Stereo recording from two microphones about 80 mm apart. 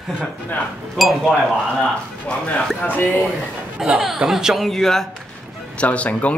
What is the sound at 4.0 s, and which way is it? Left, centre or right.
Speech, centre.